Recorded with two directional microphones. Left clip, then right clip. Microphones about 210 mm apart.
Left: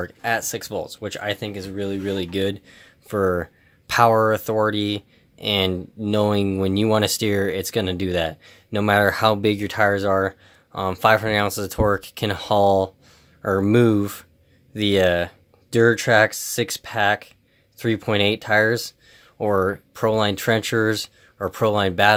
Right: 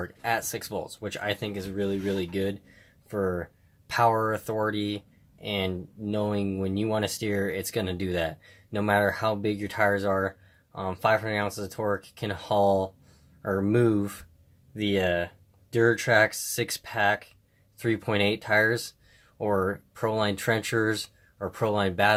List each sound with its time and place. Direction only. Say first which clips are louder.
0.0 s speech: left 5 dB; 25° left (ahead or behind)